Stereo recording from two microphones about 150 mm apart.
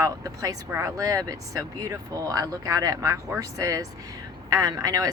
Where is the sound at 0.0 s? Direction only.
20° right (ahead or behind).